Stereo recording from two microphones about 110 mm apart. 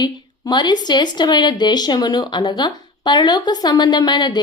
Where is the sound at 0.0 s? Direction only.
40° left (ahead or behind).